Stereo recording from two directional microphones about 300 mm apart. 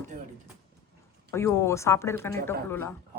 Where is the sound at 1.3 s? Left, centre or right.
Centre.